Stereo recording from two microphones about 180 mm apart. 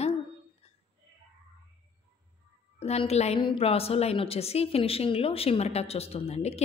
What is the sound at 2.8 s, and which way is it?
A woman's voice, 35° left (ahead or behind).